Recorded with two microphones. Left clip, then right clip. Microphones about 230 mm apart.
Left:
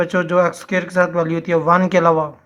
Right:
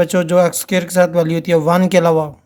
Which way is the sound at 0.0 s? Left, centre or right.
Right.